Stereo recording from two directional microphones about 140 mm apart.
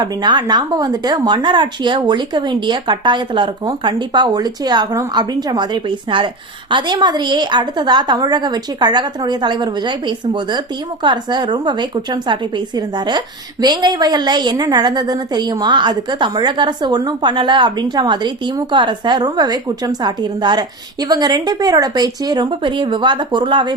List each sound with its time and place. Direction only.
0.0 s a woman's voice: 30° right (ahead or behind)